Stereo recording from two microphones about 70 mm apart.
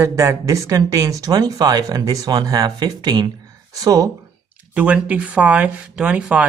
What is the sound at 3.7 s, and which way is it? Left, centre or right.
Speech, right.